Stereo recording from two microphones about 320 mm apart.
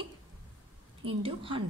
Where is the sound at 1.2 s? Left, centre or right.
Centre.